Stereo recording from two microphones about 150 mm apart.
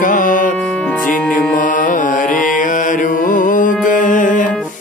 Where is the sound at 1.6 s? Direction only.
60° left (ahead or behind).